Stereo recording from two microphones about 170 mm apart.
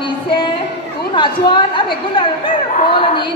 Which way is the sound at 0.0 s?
30° left (ahead or behind).